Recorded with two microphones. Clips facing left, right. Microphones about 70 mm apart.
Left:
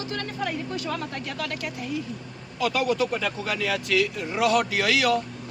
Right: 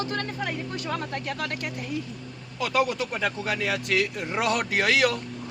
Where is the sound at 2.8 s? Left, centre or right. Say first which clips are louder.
Even; right.